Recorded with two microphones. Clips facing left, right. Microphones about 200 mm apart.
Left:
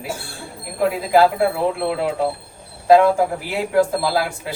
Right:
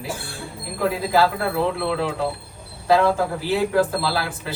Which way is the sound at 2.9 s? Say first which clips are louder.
Left 4 dB; 15° left (ahead or behind).